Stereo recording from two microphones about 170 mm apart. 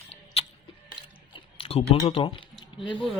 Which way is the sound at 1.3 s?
35° left (ahead or behind).